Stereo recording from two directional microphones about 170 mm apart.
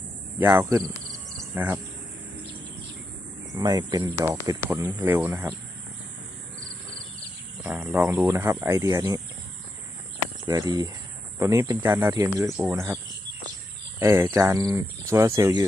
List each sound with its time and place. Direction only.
0.3 s insect: 15° right (ahead or behind)
1.5 s speech: 10° right (ahead or behind)
3.5 s speech: 20° right (ahead or behind)
7.6 s speech: 10° right (ahead or behind)
10.4 s speech: 25° right (ahead or behind)
12.5 s speech: centre (ahead or behind)
12.7 s speech: 20° right (ahead or behind)
14.0 s speech: 15° right (ahead or behind)